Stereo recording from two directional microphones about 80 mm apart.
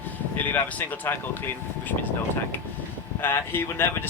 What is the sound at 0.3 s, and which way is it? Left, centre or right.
Speech, left.